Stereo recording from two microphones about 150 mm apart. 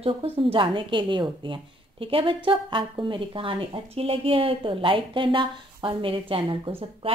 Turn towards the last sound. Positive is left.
turn(degrees=-40)  # may be behind; listen again after turning